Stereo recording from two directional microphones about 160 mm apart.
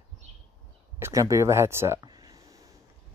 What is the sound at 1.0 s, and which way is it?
Speech, 20° right (ahead or behind).